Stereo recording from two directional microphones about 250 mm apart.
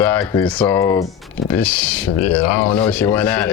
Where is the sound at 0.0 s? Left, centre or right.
Centre.